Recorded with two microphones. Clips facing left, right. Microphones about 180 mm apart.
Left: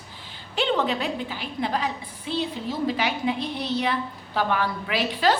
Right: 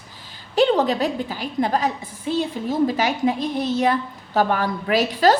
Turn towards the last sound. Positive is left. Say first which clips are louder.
# right 6 dB
turn(degrees=-40)  # may be behind; listen again after turning